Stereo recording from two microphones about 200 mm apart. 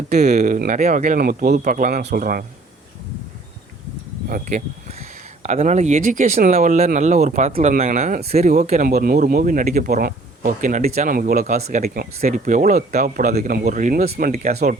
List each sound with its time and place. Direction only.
0.1 s speech: 35° right (ahead or behind)
4.3 s speech: 40° right (ahead or behind)
8.9 s speech: 50° right (ahead or behind)
14.3 s speech: 35° right (ahead or behind)